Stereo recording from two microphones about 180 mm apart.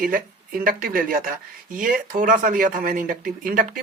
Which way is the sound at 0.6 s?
50° right (ahead or behind).